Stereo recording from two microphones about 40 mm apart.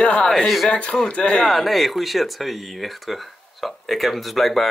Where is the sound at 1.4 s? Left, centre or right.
Centre.